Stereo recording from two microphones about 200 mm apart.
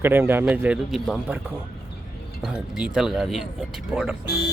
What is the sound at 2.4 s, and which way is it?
Speech, 5° right (ahead or behind).